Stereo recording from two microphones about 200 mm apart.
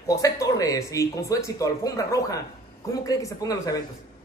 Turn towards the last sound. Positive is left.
turn(degrees=15)  # may be behind; listen again after turning